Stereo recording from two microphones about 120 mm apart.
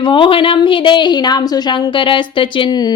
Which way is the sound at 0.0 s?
45° left (ahead or behind).